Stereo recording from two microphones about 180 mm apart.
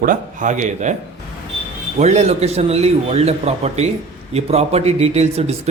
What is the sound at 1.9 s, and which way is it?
A man's voice, 40° right (ahead or behind).